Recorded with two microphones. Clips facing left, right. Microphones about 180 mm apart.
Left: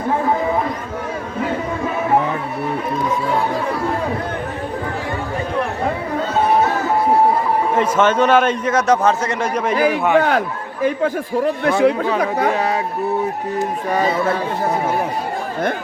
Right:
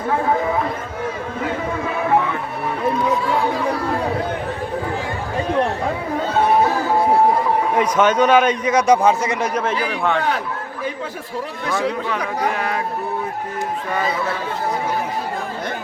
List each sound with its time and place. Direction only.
7.8 s a man's voice: 10° right (ahead or behind)
9.8 s a man's voice: 5° left (ahead or behind)
10.2 s speech: 55° left (ahead or behind)
12.5 s speech: 35° left (ahead or behind)
13.9 s speech: 40° left (ahead or behind)